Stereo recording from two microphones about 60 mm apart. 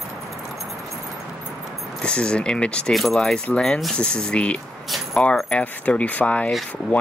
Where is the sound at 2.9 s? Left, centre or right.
Centre.